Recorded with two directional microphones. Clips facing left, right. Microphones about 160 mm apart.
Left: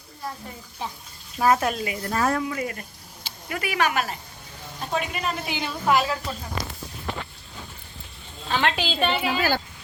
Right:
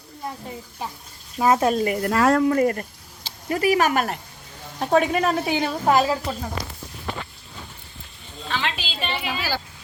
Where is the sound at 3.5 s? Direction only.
35° right (ahead or behind).